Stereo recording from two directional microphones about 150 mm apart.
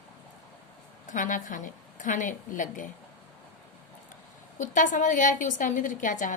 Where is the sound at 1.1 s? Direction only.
60° left (ahead or behind).